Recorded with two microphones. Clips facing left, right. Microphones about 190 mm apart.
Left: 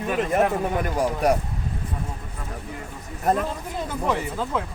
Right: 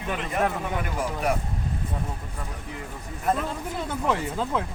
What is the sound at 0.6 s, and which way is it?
Speech, 40° left (ahead or behind).